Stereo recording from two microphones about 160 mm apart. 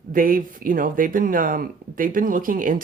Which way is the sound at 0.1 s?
60° right (ahead or behind).